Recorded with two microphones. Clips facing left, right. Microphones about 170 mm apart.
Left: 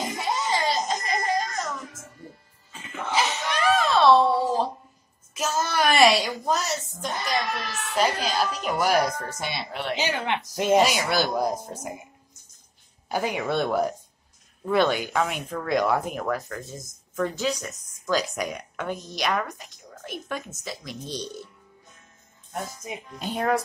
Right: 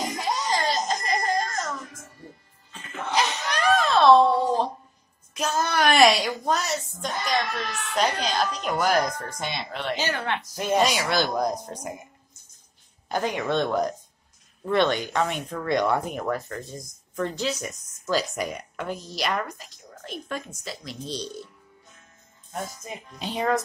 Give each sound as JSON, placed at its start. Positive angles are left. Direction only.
{"t": 0.2, "sound": "a sound", "side_deg": 0}
{"t": 3.1, "sound": "a sound", "side_deg": 0}
{"t": 5.3, "sound": "a woman's voice", "side_deg": 0}
{"t": 9.9, "sound": "speech", "side_deg": 15}
{"t": 11.0, "sound": "speech", "side_deg": 10}
{"t": 13.1, "sound": "speech", "side_deg": 10}
{"t": 22.8, "sound": "speech", "side_deg": 5}